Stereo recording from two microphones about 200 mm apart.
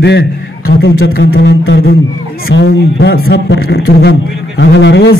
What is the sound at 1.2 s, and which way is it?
A man's voice, 60° left (ahead or behind).